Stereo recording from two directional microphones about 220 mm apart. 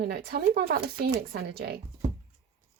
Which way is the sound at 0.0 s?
45° right (ahead or behind).